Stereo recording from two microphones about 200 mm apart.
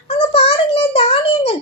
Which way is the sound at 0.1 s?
30° left (ahead or behind).